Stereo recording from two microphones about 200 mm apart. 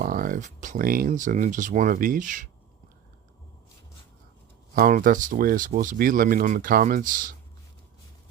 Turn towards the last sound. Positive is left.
turn(degrees=-40)  # may be behind; listen again after turning